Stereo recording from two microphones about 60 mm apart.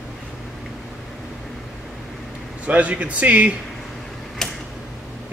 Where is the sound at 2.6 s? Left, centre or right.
Right.